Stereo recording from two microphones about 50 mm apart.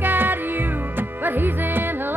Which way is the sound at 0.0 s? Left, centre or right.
Right.